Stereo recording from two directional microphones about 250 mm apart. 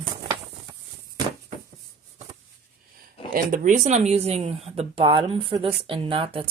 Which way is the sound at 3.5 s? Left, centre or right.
Right.